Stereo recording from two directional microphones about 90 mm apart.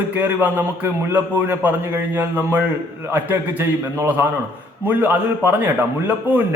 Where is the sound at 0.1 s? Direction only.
20° right (ahead or behind).